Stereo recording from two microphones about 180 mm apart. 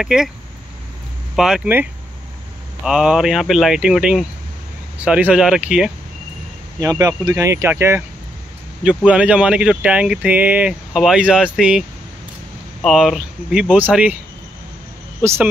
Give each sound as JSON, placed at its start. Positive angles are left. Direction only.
{"t": 0.0, "sound": "speech", "side_deg": -5}
{"t": 1.3, "sound": "speech", "side_deg": -5}
{"t": 6.8, "sound": "speech", "side_deg": -20}
{"t": 12.8, "sound": "speech", "side_deg": 0}